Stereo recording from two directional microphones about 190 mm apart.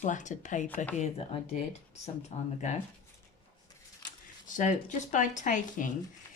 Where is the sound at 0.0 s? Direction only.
40° left (ahead or behind).